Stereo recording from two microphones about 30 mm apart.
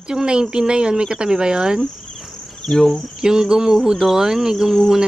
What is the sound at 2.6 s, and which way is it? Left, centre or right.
Cricket, centre.